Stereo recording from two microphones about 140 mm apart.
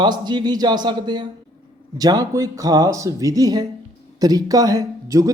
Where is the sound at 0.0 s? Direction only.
30° right (ahead or behind).